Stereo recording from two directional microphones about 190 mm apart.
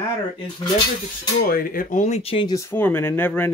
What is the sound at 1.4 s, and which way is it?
Speech, 50° left (ahead or behind).